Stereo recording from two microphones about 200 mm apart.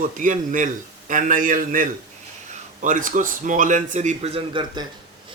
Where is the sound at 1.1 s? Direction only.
40° right (ahead or behind).